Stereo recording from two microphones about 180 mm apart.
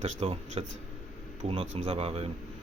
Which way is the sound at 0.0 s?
40° right (ahead or behind).